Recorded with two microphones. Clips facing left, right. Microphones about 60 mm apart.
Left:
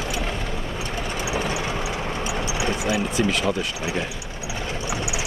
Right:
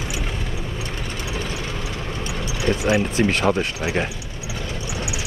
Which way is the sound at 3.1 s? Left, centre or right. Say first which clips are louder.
Right 3 dB; right.